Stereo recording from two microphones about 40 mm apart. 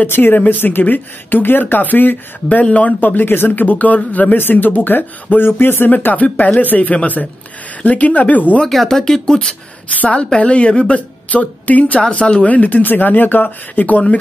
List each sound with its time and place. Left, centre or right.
0.0 s speech: left
0.4 s speech: left
2.6 s speech: left
3.0 s speech: left
3.5 s speech: left
4.4 s speech: left
6.0 s speech: left
8.8 s speech: centre
9.9 s speech: left
11.2 s speech: left